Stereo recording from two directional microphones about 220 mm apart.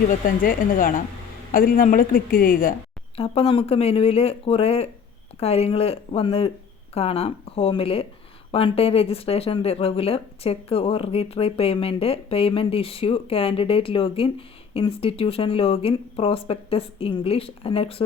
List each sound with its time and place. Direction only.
0.1 s a woman's voice: 40° left (ahead or behind)
3.2 s speech: 25° left (ahead or behind)